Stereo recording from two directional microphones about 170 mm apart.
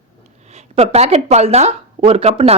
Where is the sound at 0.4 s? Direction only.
40° right (ahead or behind).